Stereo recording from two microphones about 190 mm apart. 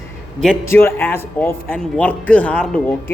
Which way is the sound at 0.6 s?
10° left (ahead or behind).